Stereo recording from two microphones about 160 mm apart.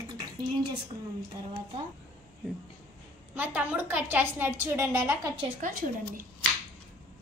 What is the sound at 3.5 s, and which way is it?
A woman's voice, 10° right (ahead or behind).